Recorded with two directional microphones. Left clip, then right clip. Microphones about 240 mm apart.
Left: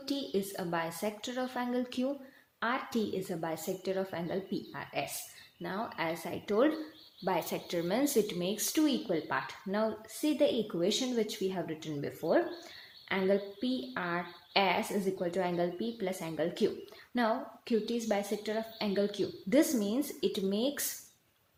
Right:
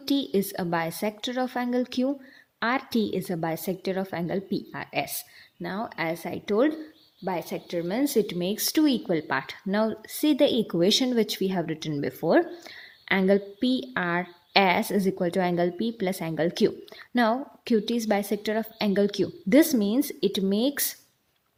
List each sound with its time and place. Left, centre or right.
0.0 s speech: right
7.3 s speech: centre; by 20.8 s right